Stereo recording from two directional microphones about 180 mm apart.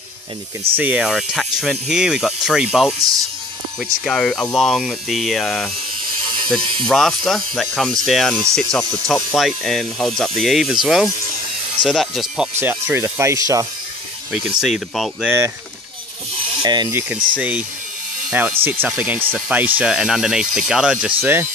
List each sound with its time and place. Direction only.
0.7 s speech: 10° right (ahead or behind)
12.5 s speech: 10° right (ahead or behind)
14.3 s speech: 5° right (ahead or behind)
16.6 s speech: 25° right (ahead or behind)
17.4 s speech: 10° right (ahead or behind)